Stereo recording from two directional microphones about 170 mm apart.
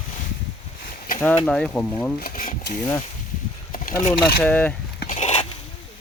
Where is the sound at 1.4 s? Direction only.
5° left (ahead or behind).